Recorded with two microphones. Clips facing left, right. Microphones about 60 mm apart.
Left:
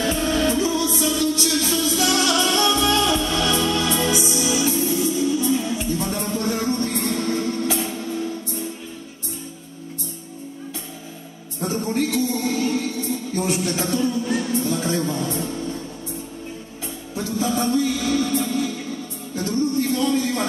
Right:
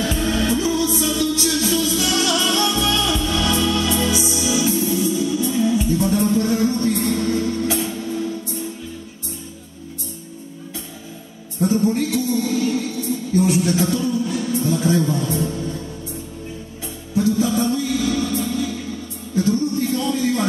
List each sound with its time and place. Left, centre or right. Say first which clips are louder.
0.0 s music: even; left
11.6 s music: right 5 dB; left
15.1 s a man's voice: right 3 dB; left
17.1 s music: right 5 dB; left
19.8 s a sound: left 1 dB; left